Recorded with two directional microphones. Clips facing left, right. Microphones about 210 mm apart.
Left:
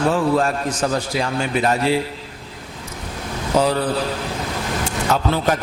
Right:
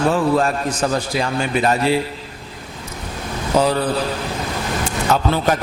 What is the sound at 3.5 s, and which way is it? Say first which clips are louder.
A man's voice: right 1 dB; 30° right (ahead or behind).